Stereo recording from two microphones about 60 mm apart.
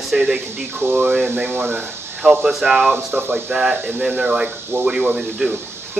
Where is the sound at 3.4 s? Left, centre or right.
Centre.